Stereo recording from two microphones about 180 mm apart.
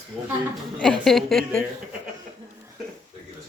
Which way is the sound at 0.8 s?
5° left (ahead or behind).